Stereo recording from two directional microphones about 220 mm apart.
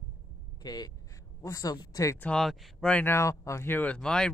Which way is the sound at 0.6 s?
20° left (ahead or behind).